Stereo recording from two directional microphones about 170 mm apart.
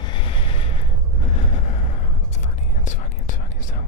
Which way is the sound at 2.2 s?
45° left (ahead or behind).